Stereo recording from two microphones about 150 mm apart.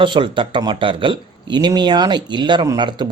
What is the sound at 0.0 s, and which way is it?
Speech, 35° right (ahead or behind).